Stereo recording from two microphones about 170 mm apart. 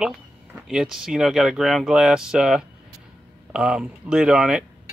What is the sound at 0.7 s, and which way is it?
Speech, 5° right (ahead or behind).